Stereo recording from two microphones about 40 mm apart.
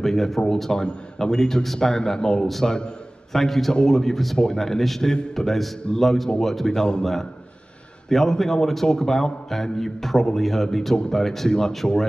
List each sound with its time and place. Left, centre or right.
0.0 s a man's voice: centre
3.3 s a man's voice: centre